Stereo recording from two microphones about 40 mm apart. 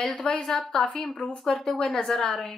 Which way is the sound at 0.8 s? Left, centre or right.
Left.